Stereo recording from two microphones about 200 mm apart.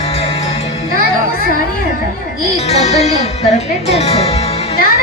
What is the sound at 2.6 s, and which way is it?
Speech, 35° left (ahead or behind).